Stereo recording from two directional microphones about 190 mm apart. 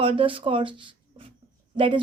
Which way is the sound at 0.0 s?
30° right (ahead or behind).